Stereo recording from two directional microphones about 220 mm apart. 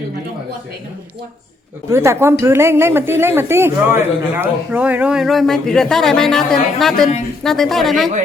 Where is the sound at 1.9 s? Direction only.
10° right (ahead or behind).